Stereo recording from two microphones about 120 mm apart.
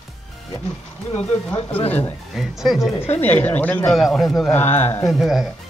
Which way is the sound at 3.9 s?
Centre (ahead or behind).